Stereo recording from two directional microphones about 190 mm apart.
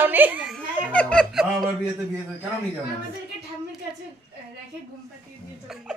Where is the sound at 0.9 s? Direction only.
5° left (ahead or behind).